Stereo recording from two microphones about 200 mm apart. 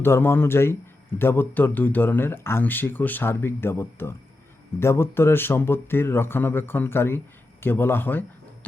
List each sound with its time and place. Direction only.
0.0 s speech: 10° left (ahead or behind)